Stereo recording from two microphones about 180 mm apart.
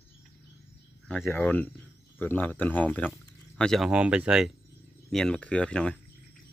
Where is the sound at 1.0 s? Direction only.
5° left (ahead or behind).